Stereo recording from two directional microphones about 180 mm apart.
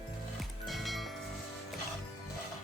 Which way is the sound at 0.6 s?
Centre (ahead or behind).